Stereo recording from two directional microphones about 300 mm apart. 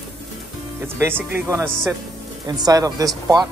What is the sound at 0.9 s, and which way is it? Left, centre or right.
Speech, centre.